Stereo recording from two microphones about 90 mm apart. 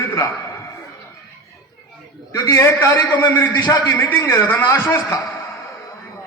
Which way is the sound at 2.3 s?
35° left (ahead or behind).